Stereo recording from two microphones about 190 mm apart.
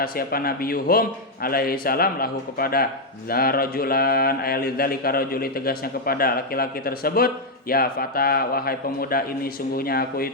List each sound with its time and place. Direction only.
0.0 s speech: 50° left (ahead or behind)